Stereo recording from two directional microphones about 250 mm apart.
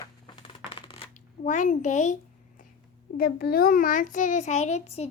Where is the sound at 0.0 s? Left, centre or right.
Centre.